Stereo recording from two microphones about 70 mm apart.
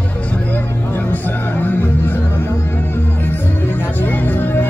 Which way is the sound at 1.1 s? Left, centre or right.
Left.